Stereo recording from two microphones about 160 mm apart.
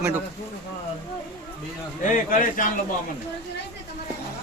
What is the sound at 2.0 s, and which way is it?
Speech, 55° left (ahead or behind).